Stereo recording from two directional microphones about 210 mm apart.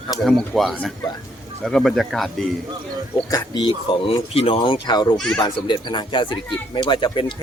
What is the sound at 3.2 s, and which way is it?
A man's voice, 20° left (ahead or behind).